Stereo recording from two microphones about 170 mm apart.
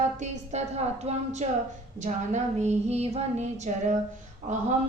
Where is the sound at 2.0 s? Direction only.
40° right (ahead or behind).